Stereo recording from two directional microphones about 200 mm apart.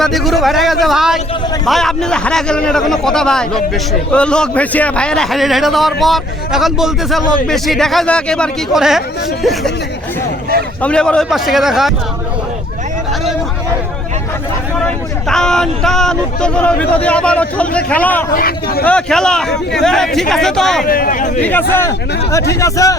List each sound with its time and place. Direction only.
0.0 s speech: centre (ahead or behind)
10.8 s speech: 5° left (ahead or behind)
14.8 s speech: 5° left (ahead or behind)
18.3 s speech: 50° left (ahead or behind)
18.9 s speech: 5° left (ahead or behind)
20.8 s speech: 45° left (ahead or behind)
21.8 s speech: 15° left (ahead or behind)